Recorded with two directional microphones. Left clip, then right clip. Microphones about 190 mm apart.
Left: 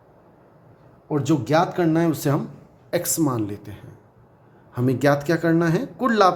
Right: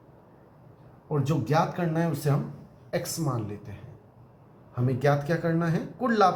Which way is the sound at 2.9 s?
60° left (ahead or behind).